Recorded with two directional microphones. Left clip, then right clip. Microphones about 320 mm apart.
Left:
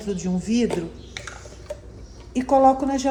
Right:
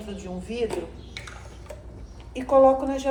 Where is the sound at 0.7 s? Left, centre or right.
Centre.